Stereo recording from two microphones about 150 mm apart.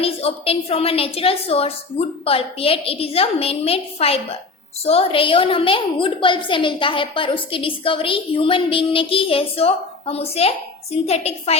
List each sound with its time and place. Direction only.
0.0 s a woman's voice: 40° left (ahead or behind)